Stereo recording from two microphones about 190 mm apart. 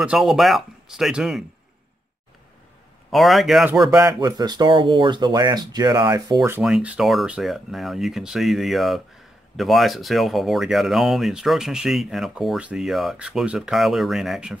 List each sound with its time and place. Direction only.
0.0 s speech: 5° right (ahead or behind)
3.1 s speech: centre (ahead or behind)
3.9 s speech: 20° right (ahead or behind)
6.6 s speech: 5° right (ahead or behind)